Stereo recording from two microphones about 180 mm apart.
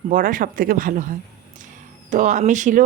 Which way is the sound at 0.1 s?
50° right (ahead or behind).